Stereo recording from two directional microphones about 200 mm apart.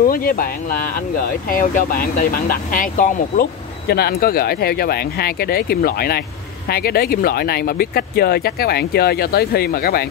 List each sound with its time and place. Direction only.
0.0 s speech: 45° left (ahead or behind)